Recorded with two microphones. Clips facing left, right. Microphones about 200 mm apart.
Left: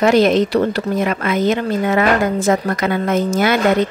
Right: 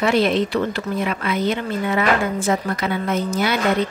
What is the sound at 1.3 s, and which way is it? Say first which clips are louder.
Speech: left 5 dB; 90° left.